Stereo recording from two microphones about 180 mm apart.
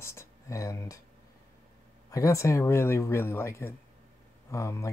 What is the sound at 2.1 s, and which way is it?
Speech, 15° left (ahead or behind).